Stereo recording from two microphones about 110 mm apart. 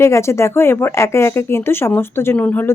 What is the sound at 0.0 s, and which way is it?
Speech, 25° left (ahead or behind).